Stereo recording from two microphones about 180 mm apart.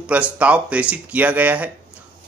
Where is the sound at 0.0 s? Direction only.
5° right (ahead or behind).